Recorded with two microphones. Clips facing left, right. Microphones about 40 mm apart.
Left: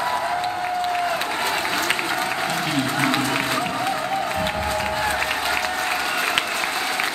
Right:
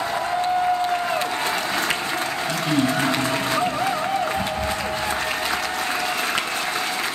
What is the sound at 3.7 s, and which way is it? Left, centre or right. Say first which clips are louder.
Music: right 1 dB; centre.